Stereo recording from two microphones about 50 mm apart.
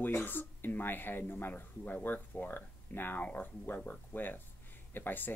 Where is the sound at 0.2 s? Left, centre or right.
Left.